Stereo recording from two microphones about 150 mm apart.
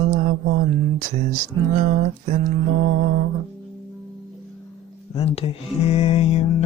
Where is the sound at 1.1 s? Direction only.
55° right (ahead or behind).